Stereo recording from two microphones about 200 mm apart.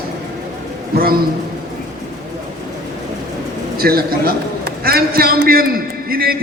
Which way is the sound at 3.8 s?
50° right (ahead or behind).